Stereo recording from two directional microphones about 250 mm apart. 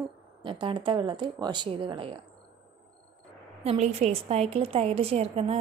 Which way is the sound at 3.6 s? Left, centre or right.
Right.